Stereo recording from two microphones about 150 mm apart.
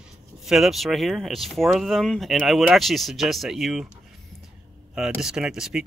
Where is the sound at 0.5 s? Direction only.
Centre (ahead or behind).